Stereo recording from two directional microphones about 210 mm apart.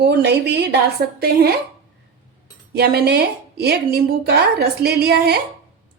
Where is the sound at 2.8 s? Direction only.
50° right (ahead or behind).